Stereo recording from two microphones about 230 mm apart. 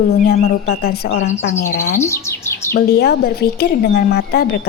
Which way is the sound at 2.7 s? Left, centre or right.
Left.